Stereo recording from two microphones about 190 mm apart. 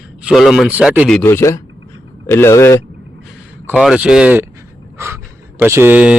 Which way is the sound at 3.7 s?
Centre (ahead or behind).